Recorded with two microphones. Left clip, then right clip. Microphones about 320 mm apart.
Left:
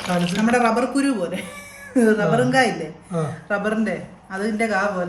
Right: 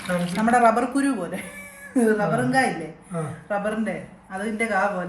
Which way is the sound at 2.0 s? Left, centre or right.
Centre.